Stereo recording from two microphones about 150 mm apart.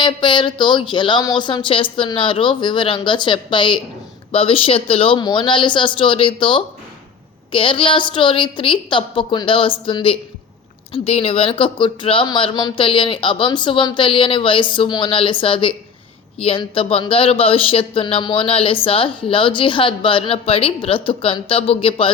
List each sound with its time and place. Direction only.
0.0 s speech: 30° left (ahead or behind)